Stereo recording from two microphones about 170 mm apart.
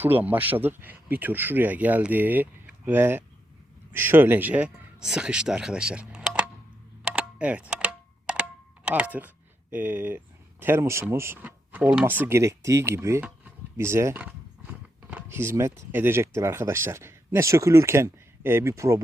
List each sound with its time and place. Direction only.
0.0 s speech: 10° right (ahead or behind)
7.0 s computer keyboard: 5° right (ahead or behind)
10.6 s speech: 15° right (ahead or behind)